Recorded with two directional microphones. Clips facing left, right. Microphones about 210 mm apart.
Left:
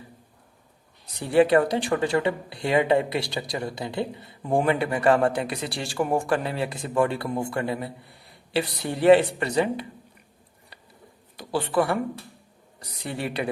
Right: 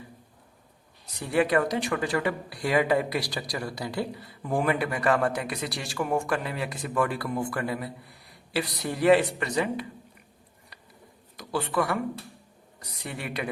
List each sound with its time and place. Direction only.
1.3 s speech: 30° left (ahead or behind)
11.3 s speech: 30° left (ahead or behind)
13.1 s speech: 30° left (ahead or behind)